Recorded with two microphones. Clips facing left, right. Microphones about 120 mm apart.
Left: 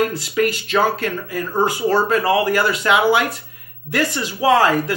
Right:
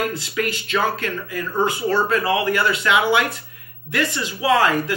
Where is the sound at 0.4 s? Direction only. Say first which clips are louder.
Left 5 dB; 45° left (ahead or behind).